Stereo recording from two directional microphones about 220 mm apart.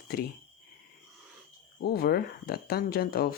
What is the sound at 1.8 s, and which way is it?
Speech, 45° left (ahead or behind).